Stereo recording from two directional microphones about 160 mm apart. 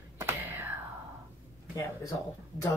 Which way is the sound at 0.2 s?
15° right (ahead or behind).